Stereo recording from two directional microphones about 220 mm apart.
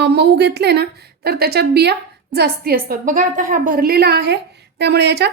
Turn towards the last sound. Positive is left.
turn(degrees=-50)  # may be behind; listen again after turning